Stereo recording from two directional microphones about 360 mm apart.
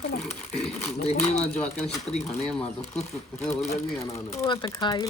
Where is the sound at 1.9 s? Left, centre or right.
Centre.